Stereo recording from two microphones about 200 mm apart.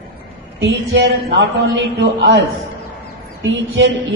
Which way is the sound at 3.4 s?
70° right (ahead or behind).